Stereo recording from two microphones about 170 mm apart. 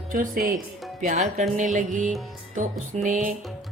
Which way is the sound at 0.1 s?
55° right (ahead or behind).